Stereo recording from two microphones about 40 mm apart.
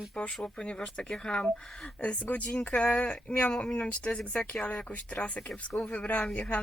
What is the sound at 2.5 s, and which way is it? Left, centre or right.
Speech, left.